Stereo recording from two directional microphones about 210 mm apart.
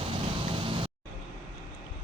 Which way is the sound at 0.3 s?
25° right (ahead or behind).